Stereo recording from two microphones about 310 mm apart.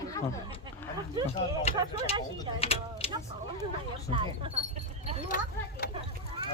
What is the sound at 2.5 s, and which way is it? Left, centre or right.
Speech, centre.